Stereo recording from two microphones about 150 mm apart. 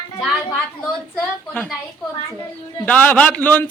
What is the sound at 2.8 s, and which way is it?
Speech, 10° left (ahead or behind).